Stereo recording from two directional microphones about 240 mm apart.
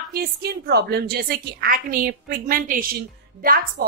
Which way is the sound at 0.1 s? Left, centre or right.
Right.